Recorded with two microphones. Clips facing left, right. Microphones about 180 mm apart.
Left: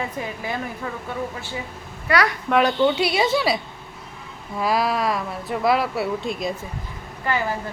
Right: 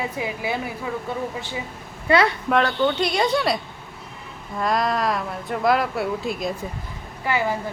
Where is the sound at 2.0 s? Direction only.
25° right (ahead or behind).